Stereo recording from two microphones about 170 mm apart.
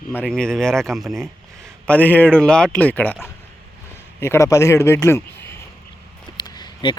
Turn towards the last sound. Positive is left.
turn(degrees=25)  # may be behind; listen again after turning